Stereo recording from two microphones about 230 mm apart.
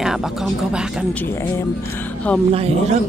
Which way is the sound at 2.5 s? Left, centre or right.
Right.